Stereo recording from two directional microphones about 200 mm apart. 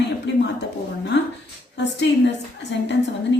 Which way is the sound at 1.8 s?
60° left (ahead or behind).